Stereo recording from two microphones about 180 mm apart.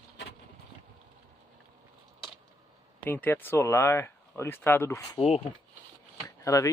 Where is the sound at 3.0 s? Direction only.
10° left (ahead or behind).